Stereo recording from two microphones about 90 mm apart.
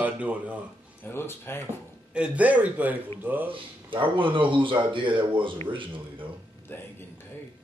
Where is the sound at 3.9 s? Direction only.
70° right (ahead or behind).